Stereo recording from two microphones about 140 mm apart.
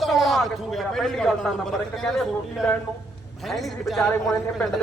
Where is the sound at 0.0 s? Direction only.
Centre (ahead or behind).